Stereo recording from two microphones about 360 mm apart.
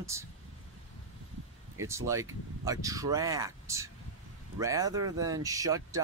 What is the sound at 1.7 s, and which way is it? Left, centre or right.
Speech, centre.